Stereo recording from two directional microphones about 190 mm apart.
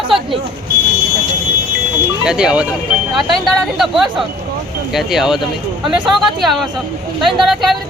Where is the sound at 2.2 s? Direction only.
5° right (ahead or behind).